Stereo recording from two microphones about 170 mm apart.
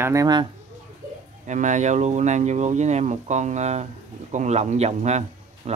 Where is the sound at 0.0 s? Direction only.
20° right (ahead or behind).